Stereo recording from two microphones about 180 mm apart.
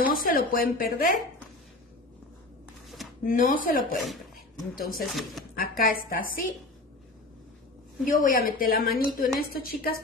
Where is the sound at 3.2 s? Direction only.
50° left (ahead or behind).